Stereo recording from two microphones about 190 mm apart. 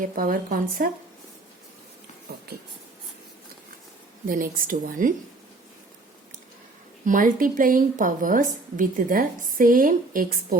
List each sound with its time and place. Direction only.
0.0 s a woman's voice: 45° right (ahead or behind)
4.3 s a woman's voice: 45° right (ahead or behind)
7.0 s a woman's voice: 45° right (ahead or behind)